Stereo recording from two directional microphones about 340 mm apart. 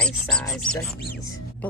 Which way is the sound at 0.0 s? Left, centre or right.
Centre.